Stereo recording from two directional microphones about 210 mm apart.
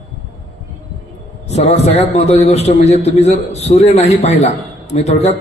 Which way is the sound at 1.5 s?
30° left (ahead or behind).